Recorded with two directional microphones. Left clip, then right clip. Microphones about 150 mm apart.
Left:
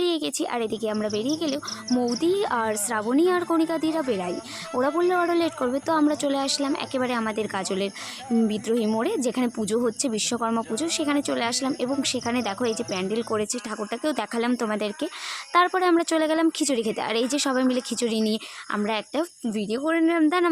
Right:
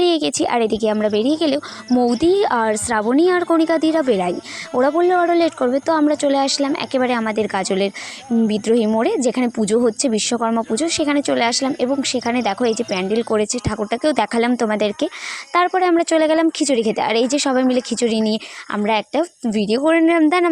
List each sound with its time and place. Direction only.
0.0 s a woman's voice: 45° right (ahead or behind)
15.5 s a woman's voice: 25° right (ahead or behind)